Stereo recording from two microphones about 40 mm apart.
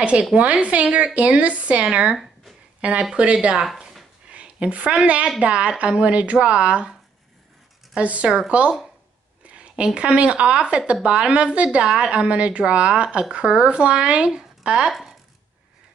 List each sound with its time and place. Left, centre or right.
0.0 s a woman's voice: right
3.5 s speech: centre
4.3 s a woman's voice: right
7.9 s a woman's voice: right
9.4 s a sound: right
9.9 s a woman's voice: right
11.8 s speech: centre
12.1 s speech: right